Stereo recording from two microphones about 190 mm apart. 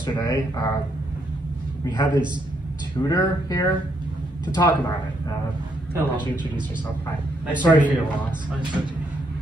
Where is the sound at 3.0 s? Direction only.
20° left (ahead or behind).